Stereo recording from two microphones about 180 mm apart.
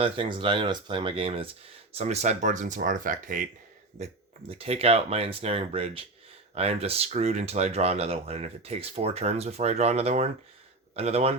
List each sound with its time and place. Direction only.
0.0 s speech: 30° right (ahead or behind); by 3.4 s 45° right (ahead or behind)
3.9 s speech: 35° right (ahead or behind)